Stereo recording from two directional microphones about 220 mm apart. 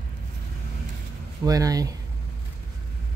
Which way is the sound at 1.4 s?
15° right (ahead or behind).